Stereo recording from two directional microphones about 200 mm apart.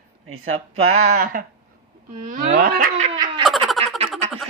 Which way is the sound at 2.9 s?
35° right (ahead or behind).